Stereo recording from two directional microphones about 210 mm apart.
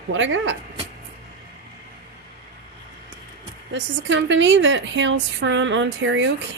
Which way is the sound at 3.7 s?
60° right (ahead or behind).